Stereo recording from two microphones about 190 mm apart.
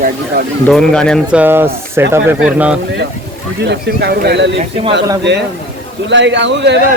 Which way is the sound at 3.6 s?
60° right (ahead or behind).